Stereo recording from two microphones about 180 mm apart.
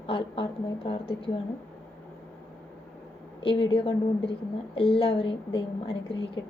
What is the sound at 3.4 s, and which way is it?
A woman's voice, 30° left (ahead or behind).